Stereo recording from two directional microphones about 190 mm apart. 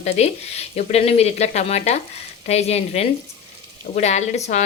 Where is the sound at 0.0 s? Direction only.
35° left (ahead or behind).